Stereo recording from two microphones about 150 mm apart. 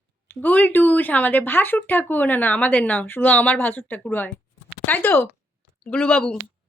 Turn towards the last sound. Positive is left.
turn(degrees=5)  # may be behind; listen again after turning